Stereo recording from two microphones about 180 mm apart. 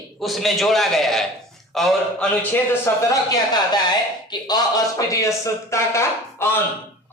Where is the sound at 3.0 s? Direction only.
20° left (ahead or behind).